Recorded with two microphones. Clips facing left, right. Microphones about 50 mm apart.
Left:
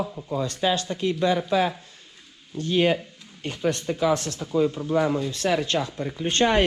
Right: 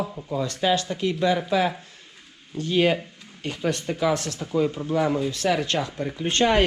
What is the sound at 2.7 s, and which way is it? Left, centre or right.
Speech, right.